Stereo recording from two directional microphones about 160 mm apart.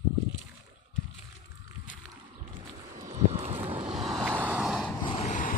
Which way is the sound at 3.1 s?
40° right (ahead or behind).